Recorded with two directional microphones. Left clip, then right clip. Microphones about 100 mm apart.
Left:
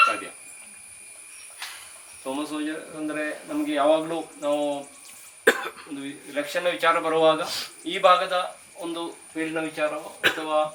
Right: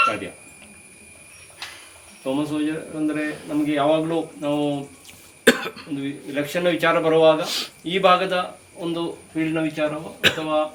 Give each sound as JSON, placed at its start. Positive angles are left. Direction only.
{"t": 2.2, "sound": "a man's voice", "side_deg": -5}
{"t": 5.5, "sound": "cough", "side_deg": -50}
{"t": 6.0, "sound": "a man's voice", "side_deg": -5}
{"t": 10.2, "sound": "speech", "side_deg": -45}
{"t": 10.4, "sound": "a man's voice", "side_deg": -5}